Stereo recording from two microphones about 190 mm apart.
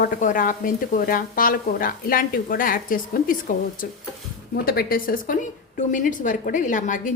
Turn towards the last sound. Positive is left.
turn(degrees=45)  # may be behind; listen again after turning